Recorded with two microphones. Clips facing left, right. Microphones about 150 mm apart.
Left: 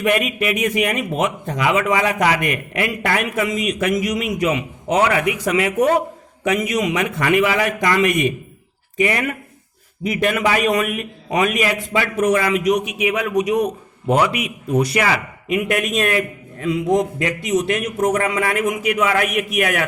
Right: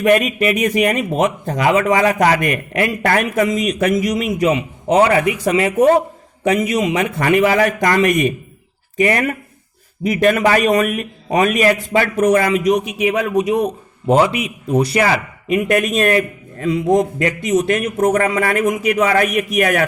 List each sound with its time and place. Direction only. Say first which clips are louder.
0.0 s speech: right 5 dB; 40° right (ahead or behind)